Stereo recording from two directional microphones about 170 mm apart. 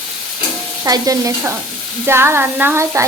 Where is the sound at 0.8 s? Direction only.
20° right (ahead or behind).